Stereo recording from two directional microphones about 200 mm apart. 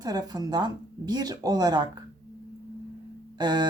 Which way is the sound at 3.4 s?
20° right (ahead or behind).